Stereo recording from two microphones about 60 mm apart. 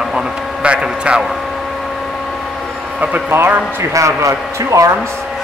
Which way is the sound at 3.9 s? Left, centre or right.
Right.